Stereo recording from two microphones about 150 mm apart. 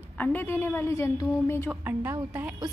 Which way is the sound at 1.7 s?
10° right (ahead or behind).